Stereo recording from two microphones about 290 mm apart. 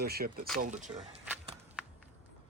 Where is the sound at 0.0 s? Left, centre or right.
Right.